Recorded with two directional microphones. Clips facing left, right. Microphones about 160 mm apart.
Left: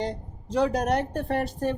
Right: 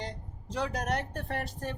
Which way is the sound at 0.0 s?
30° left (ahead or behind).